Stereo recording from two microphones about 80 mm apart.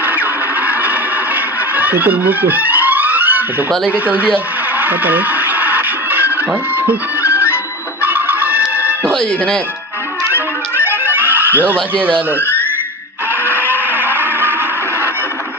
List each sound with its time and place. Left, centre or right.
0.0 s music: right
3.9 s speech: centre
4.7 s music: right
8.0 s music: right
10.3 s music: right
13.5 s a sound: left
13.9 s a sound: right